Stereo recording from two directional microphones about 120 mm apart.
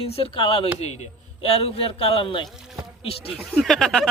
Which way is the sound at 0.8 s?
60° left (ahead or behind).